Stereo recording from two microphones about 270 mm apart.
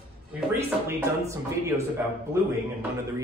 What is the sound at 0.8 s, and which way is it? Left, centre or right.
Speech, centre.